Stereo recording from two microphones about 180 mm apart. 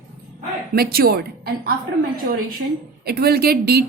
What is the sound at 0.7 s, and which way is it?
Speech, 55° right (ahead or behind).